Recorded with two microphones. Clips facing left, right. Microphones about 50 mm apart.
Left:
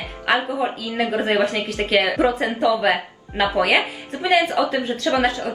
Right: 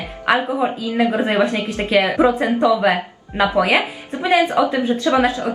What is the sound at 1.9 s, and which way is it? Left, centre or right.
A woman's voice, centre.